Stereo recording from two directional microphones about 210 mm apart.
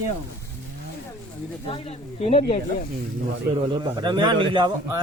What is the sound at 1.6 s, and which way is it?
Speech, 30° left (ahead or behind).